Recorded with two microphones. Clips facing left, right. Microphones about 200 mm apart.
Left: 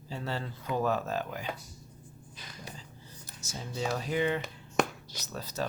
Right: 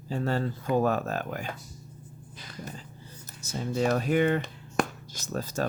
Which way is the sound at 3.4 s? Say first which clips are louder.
Right 8 dB; 60° right (ahead or behind).